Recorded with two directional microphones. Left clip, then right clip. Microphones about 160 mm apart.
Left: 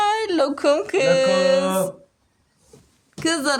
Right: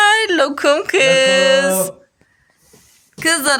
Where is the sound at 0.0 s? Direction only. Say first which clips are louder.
Right 7 dB; 5° right (ahead or behind).